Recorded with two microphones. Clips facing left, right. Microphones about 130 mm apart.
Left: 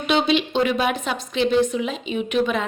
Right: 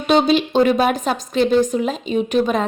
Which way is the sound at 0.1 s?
40° right (ahead or behind).